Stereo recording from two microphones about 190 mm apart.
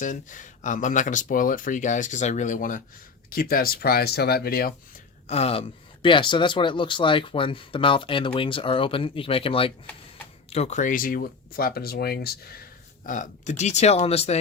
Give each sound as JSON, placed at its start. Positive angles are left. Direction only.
{"t": 0.0, "sound": "speech", "side_deg": 40}
{"t": 5.3, "sound": "speech", "side_deg": 30}
{"t": 13.1, "sound": "speech", "side_deg": 40}